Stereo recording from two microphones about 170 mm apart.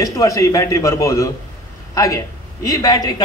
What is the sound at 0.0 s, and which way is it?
A man's voice, 20° left (ahead or behind).